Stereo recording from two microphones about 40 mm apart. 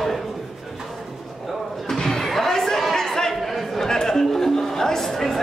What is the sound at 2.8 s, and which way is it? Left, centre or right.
Chatter, centre.